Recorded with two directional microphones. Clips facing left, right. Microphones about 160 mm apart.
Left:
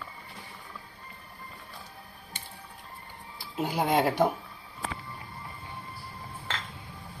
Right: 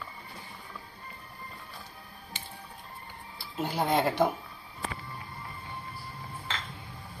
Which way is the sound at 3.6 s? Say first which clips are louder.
Left 2 dB; 5° left (ahead or behind).